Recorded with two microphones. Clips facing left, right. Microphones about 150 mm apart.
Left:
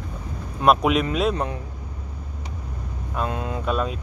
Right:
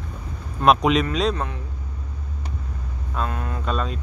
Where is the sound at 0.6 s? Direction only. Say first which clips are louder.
Right 1 dB; 5° left (ahead or behind).